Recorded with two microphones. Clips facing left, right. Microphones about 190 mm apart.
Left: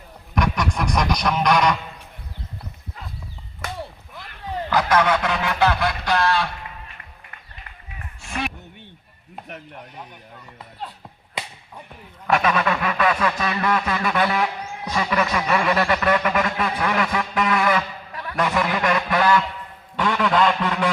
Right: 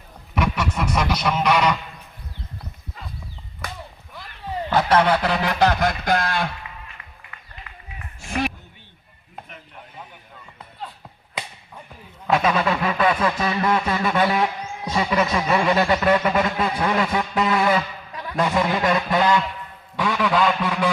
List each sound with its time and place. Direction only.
0.3 s a sound: 5° right (ahead or behind)
4.7 s speech: 30° right (ahead or behind); by 6.5 s 50° right (ahead or behind)
12.3 s speech: 25° right (ahead or behind)
14.8 s a sound: 25° right (ahead or behind)
18.3 s speech: 25° right (ahead or behind)
20.0 s a man's voice: 10° right (ahead or behind)